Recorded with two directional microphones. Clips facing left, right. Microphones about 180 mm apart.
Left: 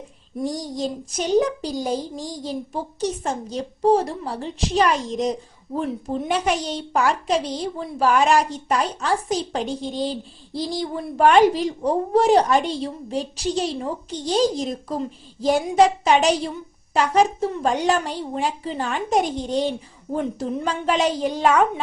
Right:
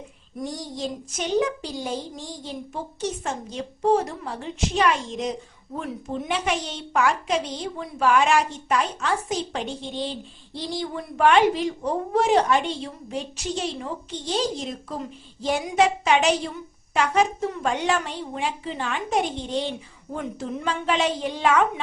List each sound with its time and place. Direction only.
0.4 s a child's voice: 40° left (ahead or behind)